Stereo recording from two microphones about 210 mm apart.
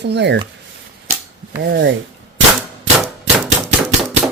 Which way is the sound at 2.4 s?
65° right (ahead or behind).